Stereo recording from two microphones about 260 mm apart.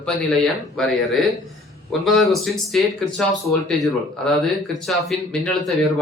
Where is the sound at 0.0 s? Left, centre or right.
Centre.